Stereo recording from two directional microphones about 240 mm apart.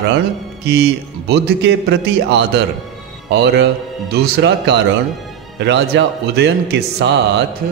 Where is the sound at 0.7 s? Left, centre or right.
Right.